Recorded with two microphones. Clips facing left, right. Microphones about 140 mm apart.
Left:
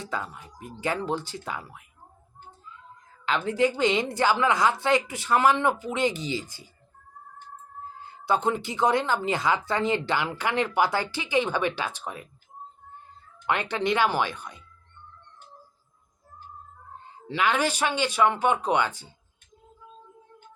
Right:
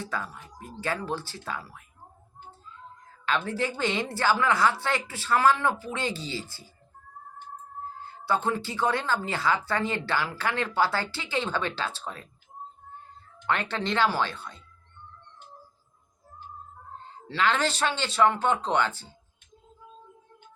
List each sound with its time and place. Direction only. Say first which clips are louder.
0.0 s speech: left 1 dB; 20° left (ahead or behind)
3.2 s speech: left 4 dB; 20° left (ahead or behind)
8.0 s speech: left 2 dB; 20° left (ahead or behind)
13.5 s speech: left 3 dB; 15° left (ahead or behind)
17.0 s speech: even; 15° left (ahead or behind)